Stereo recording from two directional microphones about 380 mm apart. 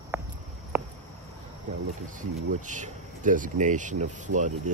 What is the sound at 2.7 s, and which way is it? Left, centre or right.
Speech, centre.